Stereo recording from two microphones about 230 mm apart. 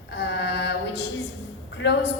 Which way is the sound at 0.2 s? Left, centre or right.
Left.